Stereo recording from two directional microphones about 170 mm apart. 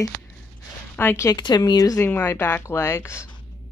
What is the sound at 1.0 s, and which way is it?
Speech, 15° left (ahead or behind).